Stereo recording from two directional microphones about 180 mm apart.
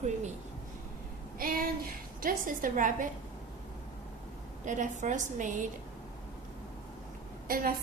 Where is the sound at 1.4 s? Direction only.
55° right (ahead or behind).